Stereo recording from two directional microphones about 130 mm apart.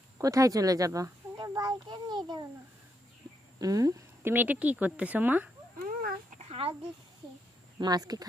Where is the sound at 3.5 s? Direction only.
25° right (ahead or behind).